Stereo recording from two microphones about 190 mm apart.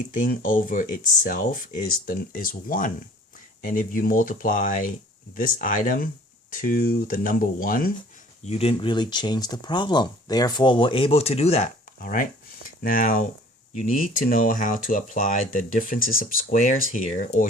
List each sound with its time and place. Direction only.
0.1 s speech: 45° left (ahead or behind)
8.4 s speech: 30° left (ahead or behind)
11.9 s speech: 45° left (ahead or behind)